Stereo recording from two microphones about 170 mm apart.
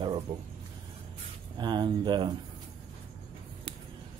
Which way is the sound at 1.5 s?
25° right (ahead or behind).